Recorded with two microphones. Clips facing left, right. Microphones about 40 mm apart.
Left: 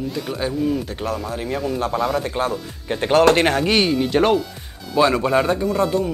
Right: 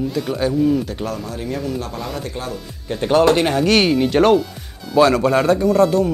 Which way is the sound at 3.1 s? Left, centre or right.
Left.